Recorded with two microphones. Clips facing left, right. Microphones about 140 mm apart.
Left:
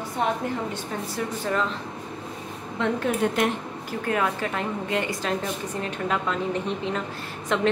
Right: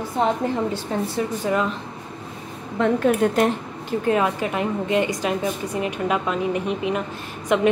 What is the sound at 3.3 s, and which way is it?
A woman's voice, 30° right (ahead or behind).